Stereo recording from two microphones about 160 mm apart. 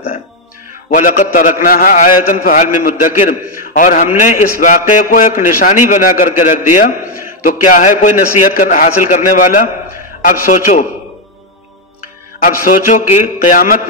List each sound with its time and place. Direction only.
0.8 s a man's voice: 50° left (ahead or behind)
12.4 s a man's voice: 60° left (ahead or behind)